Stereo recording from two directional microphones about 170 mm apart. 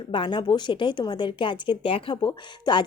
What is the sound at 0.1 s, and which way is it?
Speech, 30° left (ahead or behind).